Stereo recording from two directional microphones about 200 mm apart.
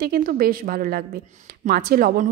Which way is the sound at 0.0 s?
45° right (ahead or behind).